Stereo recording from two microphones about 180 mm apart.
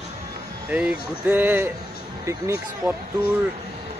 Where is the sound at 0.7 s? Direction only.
5° right (ahead or behind).